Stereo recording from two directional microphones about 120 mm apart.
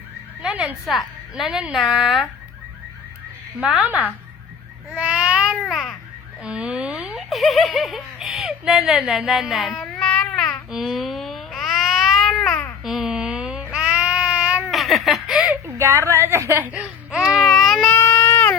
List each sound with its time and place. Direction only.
0.4 s a woman's voice: 10° right (ahead or behind)
3.6 s a woman's voice: 10° right (ahead or behind)
4.9 s babbling: 10° right (ahead or behind)
6.4 s speech: 10° right (ahead or behind); by 10.6 s 10° left (ahead or behind)
10.7 s a sound: centre (ahead or behind)
12.8 s child singing: 5° right (ahead or behind)
14.7 s giggle: centre (ahead or behind)
15.6 s baby cry: 25° right (ahead or behind); by 17.9 s 5° left (ahead or behind)
17.9 s baby cry: 20° left (ahead or behind)